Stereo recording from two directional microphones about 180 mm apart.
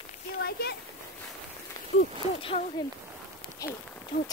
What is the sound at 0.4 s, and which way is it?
Speech, 60° left (ahead or behind).